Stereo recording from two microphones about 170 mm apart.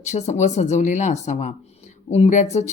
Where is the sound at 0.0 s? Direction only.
40° left (ahead or behind).